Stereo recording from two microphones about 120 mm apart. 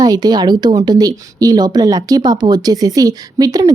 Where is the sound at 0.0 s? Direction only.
35° right (ahead or behind).